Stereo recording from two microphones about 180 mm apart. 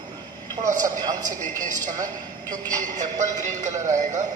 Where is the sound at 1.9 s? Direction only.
20° right (ahead or behind).